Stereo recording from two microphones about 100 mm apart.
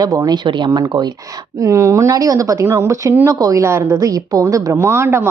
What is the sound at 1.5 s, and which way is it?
A woman's voice, 35° right (ahead or behind).